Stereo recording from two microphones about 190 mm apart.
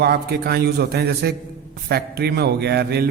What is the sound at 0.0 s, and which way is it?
A man's voice, 55° right (ahead or behind).